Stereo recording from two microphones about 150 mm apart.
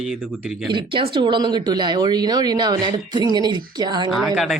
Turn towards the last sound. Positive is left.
turn(degrees=0)  # may be behind; listen again after turning